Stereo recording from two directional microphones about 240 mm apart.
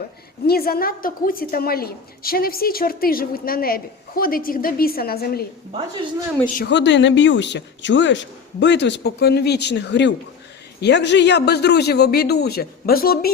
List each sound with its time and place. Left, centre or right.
0.4 s a woman's voice: left
6.6 s speech: left